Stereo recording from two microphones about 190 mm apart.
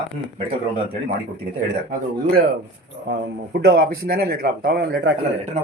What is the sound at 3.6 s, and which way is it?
A man's voice, 60° right (ahead or behind).